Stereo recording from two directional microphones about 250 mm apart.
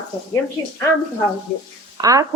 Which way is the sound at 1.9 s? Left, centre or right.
Centre.